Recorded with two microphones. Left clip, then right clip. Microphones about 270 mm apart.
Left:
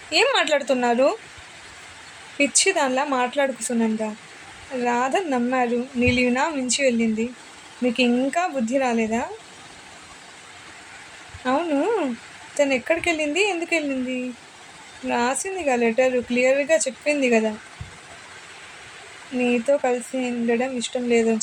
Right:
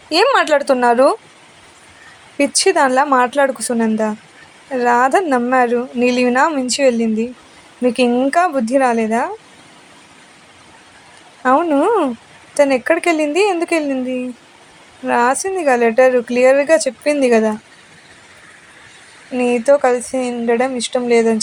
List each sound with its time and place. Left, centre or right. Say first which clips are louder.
0.1 s a woman's voice: right 6 dB; centre
2.4 s a woman's voice: right 7 dB; centre
11.4 s a woman's voice: right 9 dB; centre
19.4 s a woman's voice: right 8 dB; right